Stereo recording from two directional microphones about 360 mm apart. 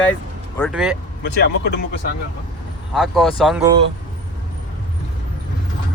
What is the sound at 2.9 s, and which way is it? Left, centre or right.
Speech, centre.